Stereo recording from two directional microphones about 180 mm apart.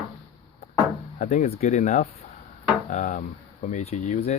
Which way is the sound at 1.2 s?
45° left (ahead or behind).